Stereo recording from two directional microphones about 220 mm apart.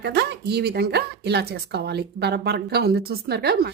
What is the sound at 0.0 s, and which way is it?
A woman's voice, 50° right (ahead or behind).